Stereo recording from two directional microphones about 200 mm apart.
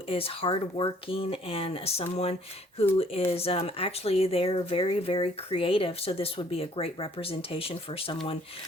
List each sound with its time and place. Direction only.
0.1 s speech: 30° left (ahead or behind)